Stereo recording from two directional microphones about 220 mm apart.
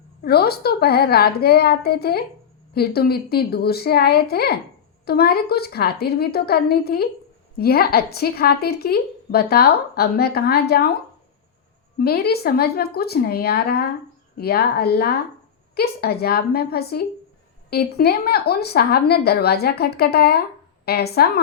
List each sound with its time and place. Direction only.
0.2 s a woman's voice: 45° left (ahead or behind)
11.9 s a woman's voice: 45° left (ahead or behind)